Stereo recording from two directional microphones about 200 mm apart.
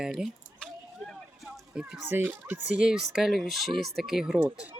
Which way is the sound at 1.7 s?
5° right (ahead or behind).